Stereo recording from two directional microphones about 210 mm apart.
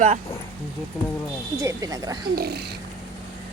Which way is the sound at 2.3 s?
50° right (ahead or behind).